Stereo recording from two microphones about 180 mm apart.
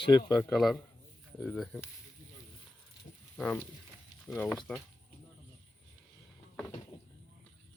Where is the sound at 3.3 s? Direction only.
5° left (ahead or behind).